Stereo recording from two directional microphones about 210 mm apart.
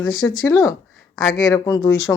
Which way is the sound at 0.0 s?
70° left (ahead or behind).